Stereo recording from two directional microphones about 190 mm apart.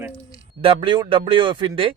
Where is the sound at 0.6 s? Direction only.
25° right (ahead or behind).